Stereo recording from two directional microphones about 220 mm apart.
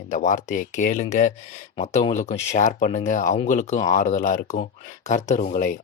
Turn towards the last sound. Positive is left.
turn(degrees=35)  # may be behind; listen again after turning